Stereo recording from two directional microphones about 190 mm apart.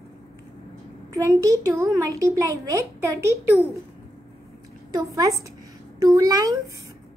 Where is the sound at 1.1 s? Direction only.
15° right (ahead or behind).